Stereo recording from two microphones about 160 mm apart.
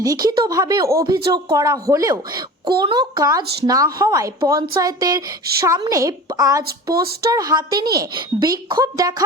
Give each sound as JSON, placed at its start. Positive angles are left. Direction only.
{"t": 0.0, "sound": "a woman's voice", "side_deg": -20}